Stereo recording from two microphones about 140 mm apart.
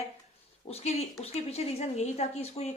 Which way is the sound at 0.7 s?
50° left (ahead or behind).